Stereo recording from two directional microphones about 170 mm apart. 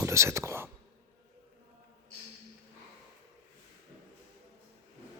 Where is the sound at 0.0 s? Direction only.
15° right (ahead or behind).